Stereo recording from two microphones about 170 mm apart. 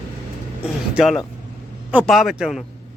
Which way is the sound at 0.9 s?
Centre (ahead or behind).